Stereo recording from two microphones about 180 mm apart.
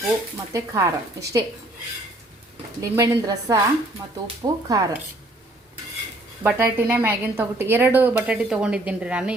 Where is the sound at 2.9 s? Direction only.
15° right (ahead or behind).